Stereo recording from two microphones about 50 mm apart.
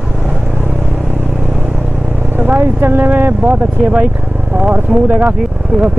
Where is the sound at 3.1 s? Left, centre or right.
Right.